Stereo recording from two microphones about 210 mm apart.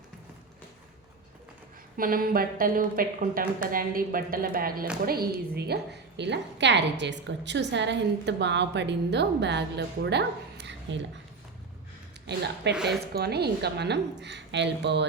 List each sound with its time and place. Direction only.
2.0 s a woman's voice: 45° right (ahead or behind)
12.2 s a woman's voice: 55° right (ahead or behind)
12.7 s a woman's voice: centre (ahead or behind)
13.1 s a woman's voice: 50° right (ahead or behind)